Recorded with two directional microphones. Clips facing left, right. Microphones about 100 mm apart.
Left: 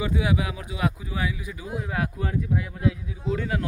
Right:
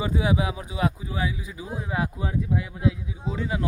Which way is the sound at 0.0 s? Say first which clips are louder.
Right 1 dB; 30° right (ahead or behind).